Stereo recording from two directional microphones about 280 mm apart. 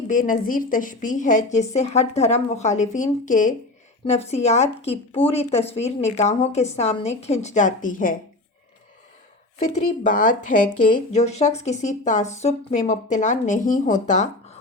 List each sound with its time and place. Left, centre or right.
0.1 s a woman's voice: left
9.7 s a woman's voice: left